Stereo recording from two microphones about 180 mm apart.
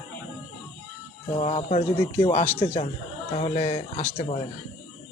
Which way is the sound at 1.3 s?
35° left (ahead or behind).